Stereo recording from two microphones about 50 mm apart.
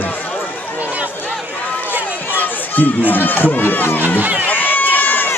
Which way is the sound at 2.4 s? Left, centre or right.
Left.